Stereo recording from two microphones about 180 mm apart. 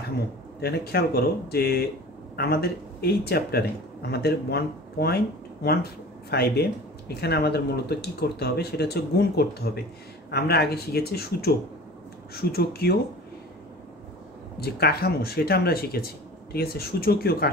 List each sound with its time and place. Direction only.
0.6 s speech: 60° left (ahead or behind)
14.6 s speech: 60° left (ahead or behind)